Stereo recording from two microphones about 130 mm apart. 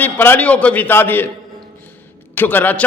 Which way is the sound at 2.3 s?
15° left (ahead or behind).